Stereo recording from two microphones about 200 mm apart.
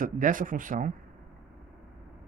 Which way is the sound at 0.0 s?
40° right (ahead or behind).